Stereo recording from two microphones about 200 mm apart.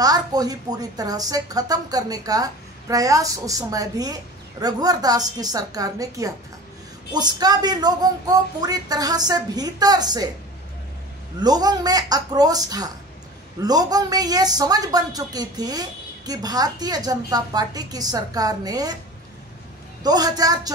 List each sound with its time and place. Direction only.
0.0 s speech: 20° right (ahead or behind)
11.3 s speech: 20° right (ahead or behind)
20.0 s speech: 20° right (ahead or behind)